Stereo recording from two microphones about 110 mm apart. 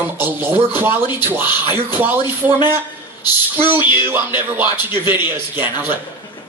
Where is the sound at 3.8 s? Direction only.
45° left (ahead or behind).